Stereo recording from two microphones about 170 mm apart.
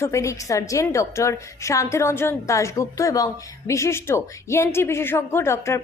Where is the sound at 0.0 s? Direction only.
15° left (ahead or behind).